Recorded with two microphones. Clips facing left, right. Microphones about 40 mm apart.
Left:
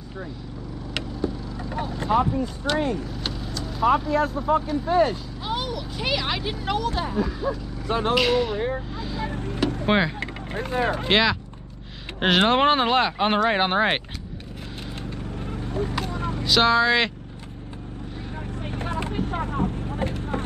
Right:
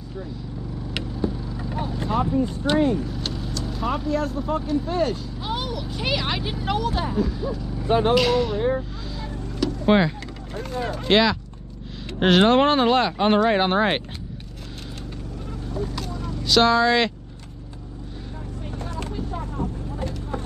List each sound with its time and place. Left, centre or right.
0.9 s vehicle: centre
2.4 s speech: centre
2.9 s speech: centre
7.8 s speech: centre
8.1 s speech: centre
8.5 s vehicle: centre
9.3 s vehicle: left
9.8 s speech: centre
10.2 s speech: left
11.1 s speech: centre
15.4 s vehicle: left
16.4 s speech: centre
18.6 s vehicle: left